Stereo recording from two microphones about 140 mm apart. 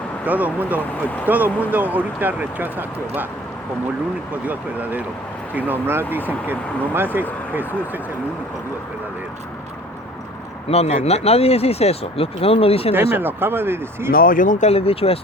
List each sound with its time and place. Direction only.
0.3 s speech: 10° right (ahead or behind)
4.4 s speech: 10° right (ahead or behind)
10.7 s speech: 50° left (ahead or behind)
13.1 s speech: 15° right (ahead or behind)
14.1 s speech: 85° left; by 14.7 s 70° left (ahead or behind)
14.7 s speech: 45° left (ahead or behind)